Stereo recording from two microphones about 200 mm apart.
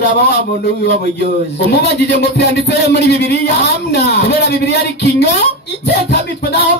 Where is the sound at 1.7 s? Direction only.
55° left (ahead or behind).